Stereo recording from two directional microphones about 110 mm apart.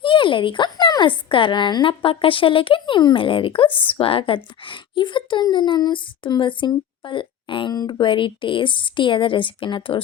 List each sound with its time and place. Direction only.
0.0 s speech: 50° left (ahead or behind)